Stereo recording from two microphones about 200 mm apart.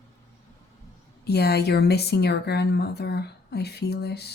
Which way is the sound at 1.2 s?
55° left (ahead or behind).